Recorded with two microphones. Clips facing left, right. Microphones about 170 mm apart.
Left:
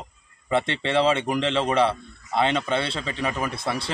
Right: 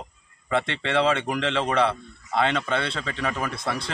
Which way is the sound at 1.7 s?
10° left (ahead or behind).